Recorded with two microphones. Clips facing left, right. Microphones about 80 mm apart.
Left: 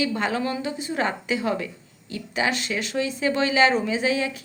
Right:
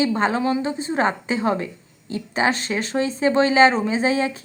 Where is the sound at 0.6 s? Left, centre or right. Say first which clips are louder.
Right 4 dB; right.